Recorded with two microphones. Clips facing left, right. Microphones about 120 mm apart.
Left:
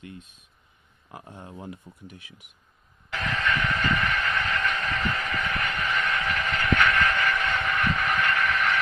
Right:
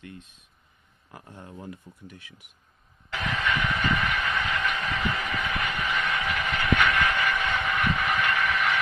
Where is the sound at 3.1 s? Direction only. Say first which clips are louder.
Left 1 dB; 10° right (ahead or behind).